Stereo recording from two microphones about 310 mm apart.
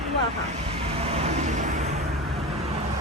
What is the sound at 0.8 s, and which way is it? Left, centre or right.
Vehicle, centre.